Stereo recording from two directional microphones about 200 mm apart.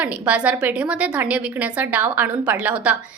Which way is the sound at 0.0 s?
5° right (ahead or behind).